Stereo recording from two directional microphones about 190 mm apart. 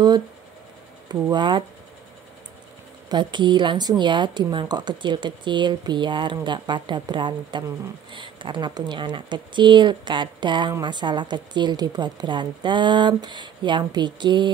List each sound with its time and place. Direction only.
1.3 s speech: 25° right (ahead or behind)
3.1 s speech: 25° right (ahead or behind)